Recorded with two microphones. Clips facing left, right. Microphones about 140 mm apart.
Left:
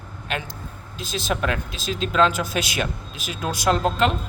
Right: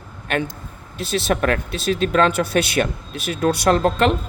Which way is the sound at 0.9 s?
60° right (ahead or behind).